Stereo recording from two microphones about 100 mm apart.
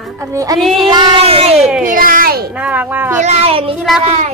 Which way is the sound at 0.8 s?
50° right (ahead or behind).